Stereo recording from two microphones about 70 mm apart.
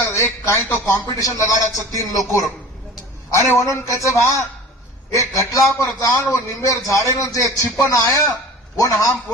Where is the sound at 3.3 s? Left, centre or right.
Left.